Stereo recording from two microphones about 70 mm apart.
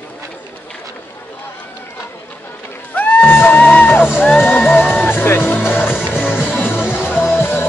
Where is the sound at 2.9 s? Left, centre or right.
Left.